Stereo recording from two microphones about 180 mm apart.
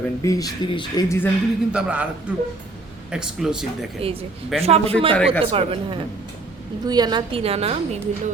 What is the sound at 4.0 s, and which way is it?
A woman's voice, 30° right (ahead or behind).